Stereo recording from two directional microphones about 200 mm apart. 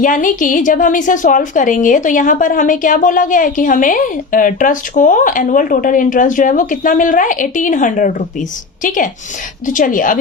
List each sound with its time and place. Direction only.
0.0 s a woman's voice: 40° left (ahead or behind)